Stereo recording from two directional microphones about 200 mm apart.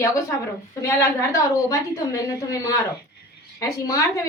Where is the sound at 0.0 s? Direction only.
15° left (ahead or behind).